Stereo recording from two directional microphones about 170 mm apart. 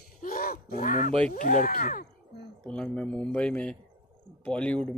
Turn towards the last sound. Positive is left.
turn(degrees=5)  # may be behind; listen again after turning